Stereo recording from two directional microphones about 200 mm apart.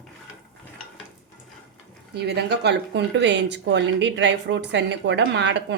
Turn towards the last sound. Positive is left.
turn(degrees=-60)  # may be behind; listen again after turning